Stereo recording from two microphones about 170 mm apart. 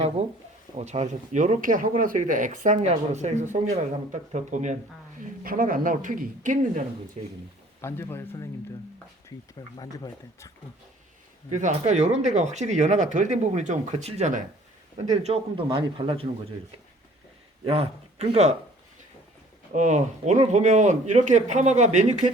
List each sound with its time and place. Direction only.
0.2 s speech: 35° right (ahead or behind)
5.4 s speech: 55° right (ahead or behind)
7.8 s speech: 15° left (ahead or behind)
9.7 s speech: 25° left (ahead or behind)
11.9 s speech: 40° right (ahead or behind)
17.7 s speech: 35° right (ahead or behind)
19.7 s speech: 45° right (ahead or behind)